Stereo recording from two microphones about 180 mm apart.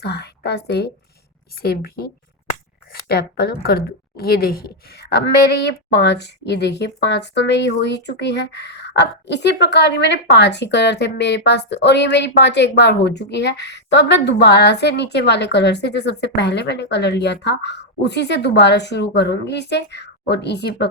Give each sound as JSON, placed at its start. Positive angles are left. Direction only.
{"t": 0.0, "sound": "a woman's voice", "side_deg": 65}